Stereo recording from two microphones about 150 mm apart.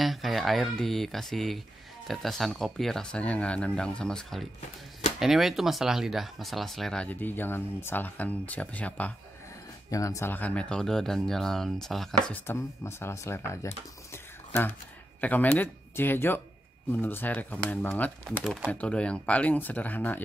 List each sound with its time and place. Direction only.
0.0 s speech: centre (ahead or behind)
9.8 s speech: 20° left (ahead or behind)
12.5 s speech: 20° left (ahead or behind)
18.4 s speech: centre (ahead or behind)